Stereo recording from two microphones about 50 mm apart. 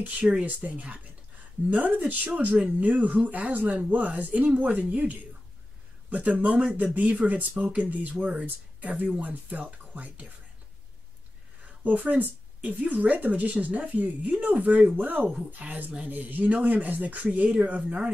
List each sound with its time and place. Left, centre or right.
0.0 s a woman's voice: right
11.6 s a woman's voice: right